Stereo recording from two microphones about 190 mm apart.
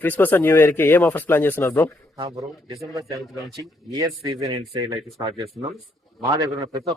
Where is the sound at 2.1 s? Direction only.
20° right (ahead or behind).